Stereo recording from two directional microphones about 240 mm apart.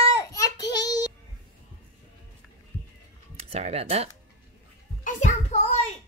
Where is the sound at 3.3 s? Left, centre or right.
Right.